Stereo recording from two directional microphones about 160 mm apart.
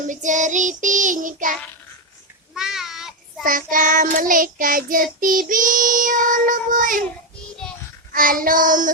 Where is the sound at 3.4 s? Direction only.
60° right (ahead or behind).